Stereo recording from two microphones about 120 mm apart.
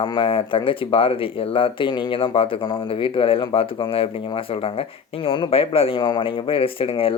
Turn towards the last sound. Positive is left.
turn(degrees=50)  # may be behind; listen again after turning